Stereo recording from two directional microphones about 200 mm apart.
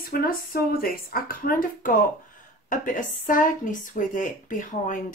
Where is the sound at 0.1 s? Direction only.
45° left (ahead or behind).